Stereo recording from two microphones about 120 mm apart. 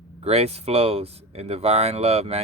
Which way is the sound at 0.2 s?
60° right (ahead or behind).